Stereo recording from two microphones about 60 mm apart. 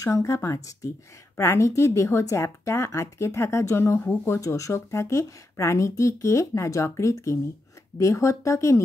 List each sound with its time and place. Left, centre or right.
0.0 s speech: left